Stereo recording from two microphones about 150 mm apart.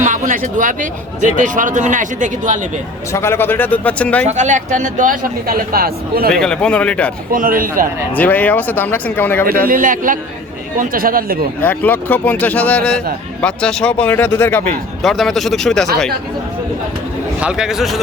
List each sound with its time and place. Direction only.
0.0 s speech: 60° right (ahead or behind)
3.1 s speech: 15° left (ahead or behind)
4.3 s speech: 50° right (ahead or behind); by 6.3 s 85° right
6.3 s speech: 5° left (ahead or behind)
7.3 s speech: 65° right (ahead or behind)
8.1 s speech: 10° left (ahead or behind)
9.5 s speech: 75° right (ahead or behind)
11.6 s speech: 10° left (ahead or behind)
15.0 s speech: centre (ahead or behind)
17.4 s speech: 5° right (ahead or behind)